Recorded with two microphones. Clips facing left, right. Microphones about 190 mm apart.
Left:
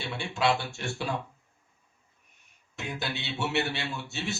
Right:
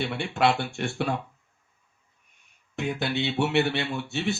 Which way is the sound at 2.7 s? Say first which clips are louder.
Right 7 dB; 55° right (ahead or behind).